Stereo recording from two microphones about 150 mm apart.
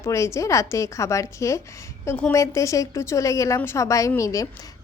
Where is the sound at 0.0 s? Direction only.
20° left (ahead or behind).